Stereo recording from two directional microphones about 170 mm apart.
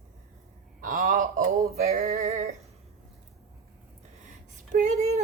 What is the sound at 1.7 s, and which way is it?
Music, 40° right (ahead or behind).